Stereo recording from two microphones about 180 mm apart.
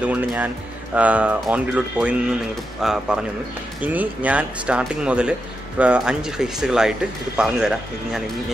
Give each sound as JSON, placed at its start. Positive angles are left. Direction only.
{"t": 0.0, "sound": "speech", "side_deg": -5}